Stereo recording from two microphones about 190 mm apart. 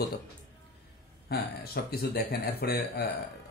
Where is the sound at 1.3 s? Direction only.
55° left (ahead or behind).